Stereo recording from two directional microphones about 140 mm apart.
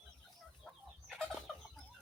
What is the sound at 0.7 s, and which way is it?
Fowl, centre (ahead or behind).